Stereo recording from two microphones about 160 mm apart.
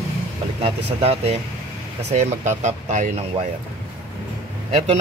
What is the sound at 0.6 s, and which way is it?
Speech, 40° right (ahead or behind).